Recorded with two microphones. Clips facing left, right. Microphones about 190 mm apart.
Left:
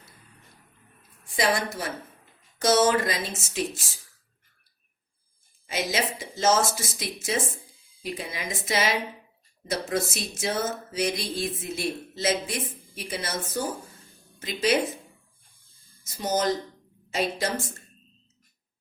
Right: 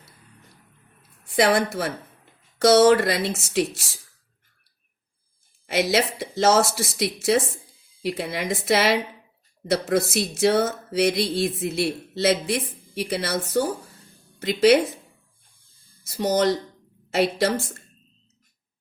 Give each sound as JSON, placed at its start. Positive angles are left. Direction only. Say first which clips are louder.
{"t": 1.4, "sound": "speech", "louder": "right 6 dB", "side_deg": -65}
{"t": 5.6, "sound": "speech", "louder": "right 6 dB", "side_deg": -70}
{"t": 8.0, "sound": "speech", "louder": "right 7 dB", "side_deg": -75}
{"t": 16.0, "sound": "a woman's voice", "louder": "right 5 dB", "side_deg": -65}